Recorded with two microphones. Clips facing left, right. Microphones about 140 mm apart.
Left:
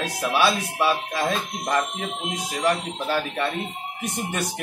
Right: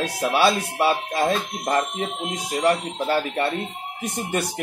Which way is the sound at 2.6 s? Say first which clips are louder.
Right 3 dB; 30° right (ahead or behind).